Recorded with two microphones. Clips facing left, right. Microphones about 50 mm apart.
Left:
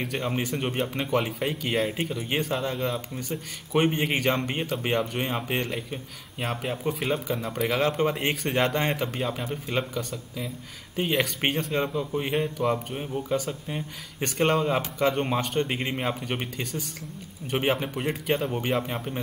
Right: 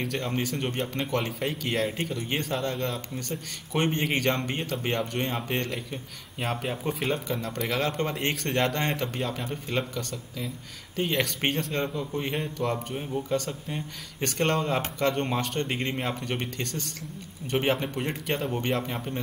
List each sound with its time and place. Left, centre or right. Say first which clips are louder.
0.0 s speech: left 1 dB; centre